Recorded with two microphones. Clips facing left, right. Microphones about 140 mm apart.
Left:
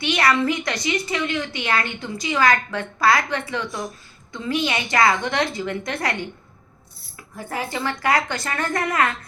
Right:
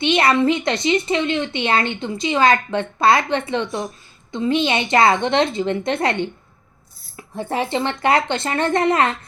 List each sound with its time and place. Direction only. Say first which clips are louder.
0.0 s a woman's voice: right 4 dB; 25° right (ahead or behind)
7.3 s a woman's voice: right 6 dB; 25° right (ahead or behind)